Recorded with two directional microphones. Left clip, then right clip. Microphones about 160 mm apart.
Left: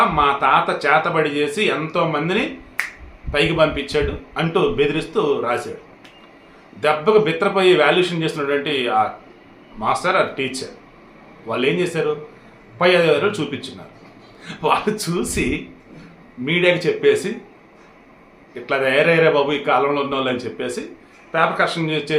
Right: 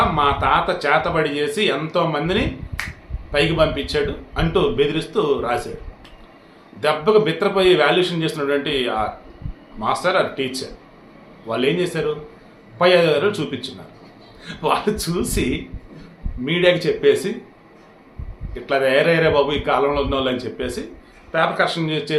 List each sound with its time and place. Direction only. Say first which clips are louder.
0.2 s a man's voice: left 2 dB; 5° left (ahead or behind)
6.7 s a man's voice: left 1 dB; 5° left (ahead or behind)
16.5 s speech: even; 5° left (ahead or behind)
18.6 s a man's voice: even; 5° left (ahead or behind)